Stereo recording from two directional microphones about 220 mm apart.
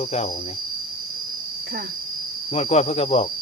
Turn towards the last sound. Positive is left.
turn(degrees=30)  # may be behind; listen again after turning